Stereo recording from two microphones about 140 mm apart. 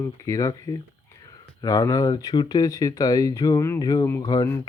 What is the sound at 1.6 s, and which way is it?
Speech, 25° left (ahead or behind).